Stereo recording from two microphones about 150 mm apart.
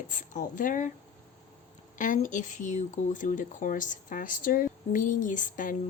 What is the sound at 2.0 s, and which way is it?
Speech, 60° left (ahead or behind).